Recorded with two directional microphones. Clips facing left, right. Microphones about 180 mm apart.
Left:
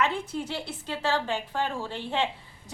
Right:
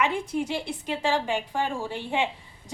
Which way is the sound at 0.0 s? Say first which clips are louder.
Right 2 dB; 15° right (ahead or behind).